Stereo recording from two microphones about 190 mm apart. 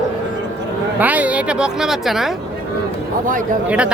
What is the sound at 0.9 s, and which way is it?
Speech, 10° right (ahead or behind).